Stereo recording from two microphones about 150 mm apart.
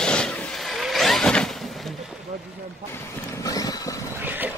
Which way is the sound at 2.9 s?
20° left (ahead or behind).